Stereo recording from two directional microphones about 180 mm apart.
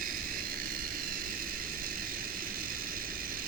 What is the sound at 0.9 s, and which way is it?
Vehicle, 55° right (ahead or behind).